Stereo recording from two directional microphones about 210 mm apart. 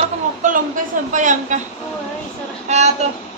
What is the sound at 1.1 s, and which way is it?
Speech, 35° right (ahead or behind).